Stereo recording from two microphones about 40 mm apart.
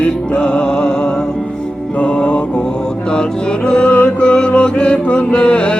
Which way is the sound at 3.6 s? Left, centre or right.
Left.